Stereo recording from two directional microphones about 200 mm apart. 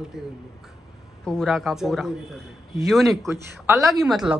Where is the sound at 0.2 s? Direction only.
Centre (ahead or behind).